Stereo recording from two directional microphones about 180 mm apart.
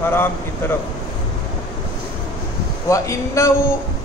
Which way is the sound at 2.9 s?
15° left (ahead or behind).